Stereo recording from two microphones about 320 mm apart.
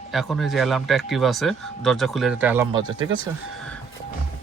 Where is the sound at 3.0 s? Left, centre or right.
Right.